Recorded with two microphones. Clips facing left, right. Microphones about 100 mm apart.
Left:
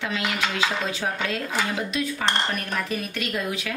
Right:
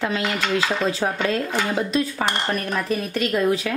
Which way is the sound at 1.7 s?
35° right (ahead or behind).